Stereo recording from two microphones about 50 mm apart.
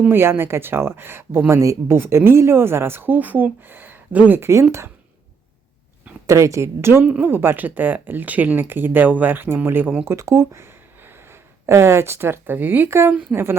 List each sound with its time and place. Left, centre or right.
0.1 s speech: right
4.4 s speech: right
6.2 s speech: right
7.2 s speech: right
10.1 s speech: right
13.3 s speech: right